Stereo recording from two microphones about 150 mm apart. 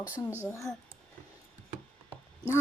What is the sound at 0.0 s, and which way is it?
Speech, 10° right (ahead or behind).